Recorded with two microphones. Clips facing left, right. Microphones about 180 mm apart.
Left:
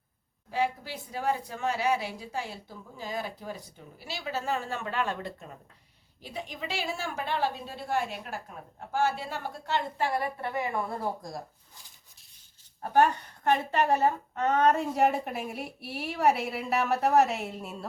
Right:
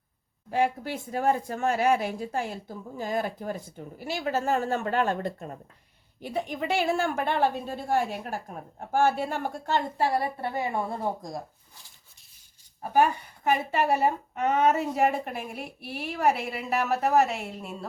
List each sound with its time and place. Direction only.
0.5 s a woman's voice: 50° right (ahead or behind)
6.2 s a woman's voice: 55° right (ahead or behind); by 11.4 s 20° right (ahead or behind)
12.8 s a woman's voice: 10° right (ahead or behind)